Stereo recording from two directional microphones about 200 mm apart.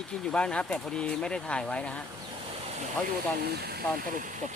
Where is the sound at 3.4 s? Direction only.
50° right (ahead or behind).